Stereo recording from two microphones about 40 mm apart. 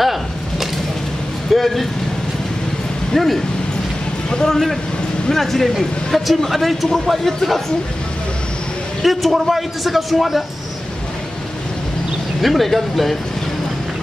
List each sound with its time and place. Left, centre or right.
0.0 s a sound: centre
1.5 s speech: centre
3.1 s speech: centre
4.3 s a man's voice: centre
5.3 s speech: centre
9.0 s speech: centre
12.4 s speech: centre